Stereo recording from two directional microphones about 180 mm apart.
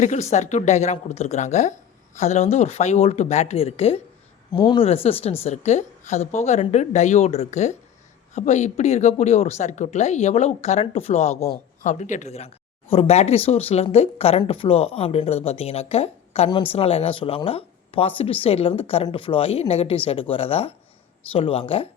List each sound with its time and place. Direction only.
0.0 s speech: 40° left (ahead or behind)